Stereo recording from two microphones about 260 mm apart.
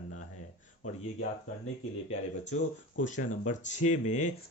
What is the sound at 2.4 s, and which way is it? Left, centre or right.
Speech, left.